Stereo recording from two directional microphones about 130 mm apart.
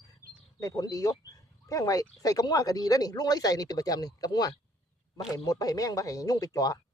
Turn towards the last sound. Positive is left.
turn(degrees=30)  # may be behind; listen again after turning